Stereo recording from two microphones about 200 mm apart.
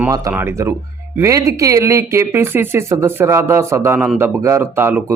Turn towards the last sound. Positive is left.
turn(degrees=-10)  # may be behind; listen again after turning